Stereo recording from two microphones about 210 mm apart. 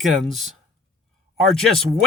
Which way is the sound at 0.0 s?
Centre (ahead or behind).